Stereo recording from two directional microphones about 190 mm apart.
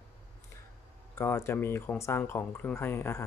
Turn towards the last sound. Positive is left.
turn(degrees=15)  # may be behind; listen again after turning